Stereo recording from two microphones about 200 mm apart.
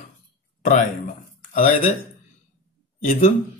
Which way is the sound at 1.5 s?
30° left (ahead or behind).